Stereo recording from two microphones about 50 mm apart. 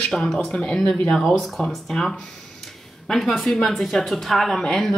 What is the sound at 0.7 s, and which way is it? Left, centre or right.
Speech, centre.